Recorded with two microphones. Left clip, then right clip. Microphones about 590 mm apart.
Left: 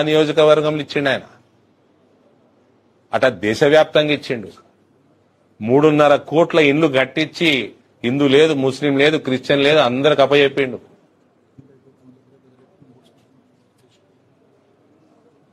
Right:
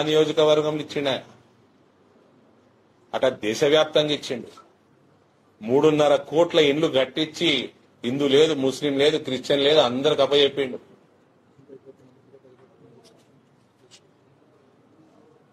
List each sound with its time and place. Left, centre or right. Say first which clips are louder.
0.0 s a man's voice: left 5 dB; left
3.1 s a man's voice: left 6 dB; left
5.6 s a man's voice: left 6 dB; left